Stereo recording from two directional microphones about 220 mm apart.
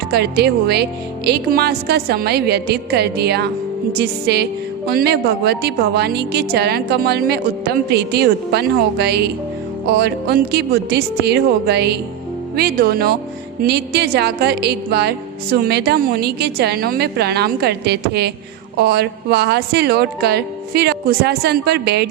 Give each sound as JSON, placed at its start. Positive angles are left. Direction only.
{"t": 0.1, "sound": "music", "side_deg": -45}